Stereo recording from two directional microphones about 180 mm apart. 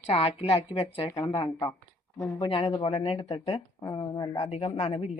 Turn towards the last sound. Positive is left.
turn(degrees=35)  # may be behind; listen again after turning